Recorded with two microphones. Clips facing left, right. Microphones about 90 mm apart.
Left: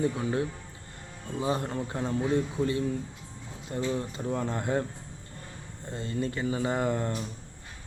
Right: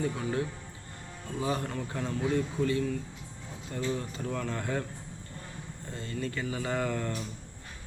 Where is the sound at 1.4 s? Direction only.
25° left (ahead or behind).